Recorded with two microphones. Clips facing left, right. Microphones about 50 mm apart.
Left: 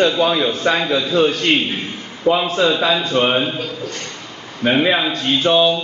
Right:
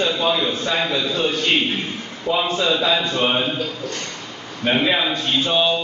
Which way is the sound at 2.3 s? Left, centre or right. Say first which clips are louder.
Left 5 dB; left.